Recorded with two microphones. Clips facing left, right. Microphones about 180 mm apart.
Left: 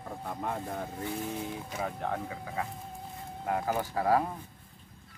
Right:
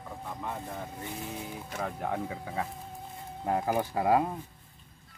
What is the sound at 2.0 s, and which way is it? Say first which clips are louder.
Speech: right 1 dB; 15° right (ahead or behind).